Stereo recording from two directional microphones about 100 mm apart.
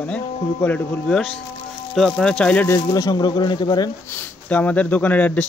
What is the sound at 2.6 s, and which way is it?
Speech, 30° left (ahead or behind).